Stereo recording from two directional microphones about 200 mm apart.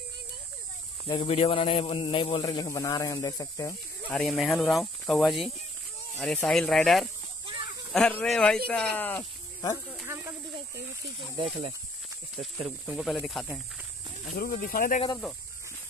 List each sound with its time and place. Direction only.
1.0 s a man's voice: 25° left (ahead or behind)
4.1 s speech: centre (ahead or behind)
10.0 s speech: 15° right (ahead or behind)
11.1 s speech: 25° right (ahead or behind)
12.6 s speech: 5° right (ahead or behind)
14.4 s speech: 45° left (ahead or behind)